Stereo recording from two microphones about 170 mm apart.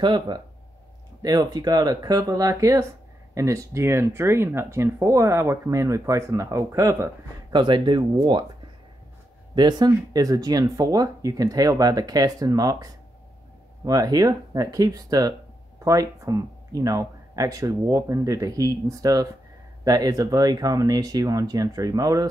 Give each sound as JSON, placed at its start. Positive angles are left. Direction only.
{"t": 0.0, "sound": "speech", "side_deg": -25}
{"t": 9.6, "sound": "speech", "side_deg": -25}